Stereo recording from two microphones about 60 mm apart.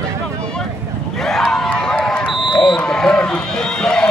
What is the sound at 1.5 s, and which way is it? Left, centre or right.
Run, centre.